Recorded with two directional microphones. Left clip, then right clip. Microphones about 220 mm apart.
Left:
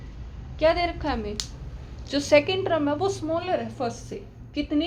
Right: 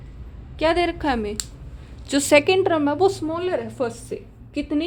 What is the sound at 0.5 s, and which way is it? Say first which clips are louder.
A woman's voice: right 2 dB; 45° right (ahead or behind).